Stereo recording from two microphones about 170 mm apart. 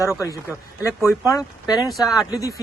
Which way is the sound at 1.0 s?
15° left (ahead or behind).